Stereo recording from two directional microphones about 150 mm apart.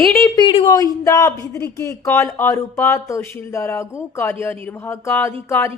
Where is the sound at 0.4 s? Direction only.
35° left (ahead or behind).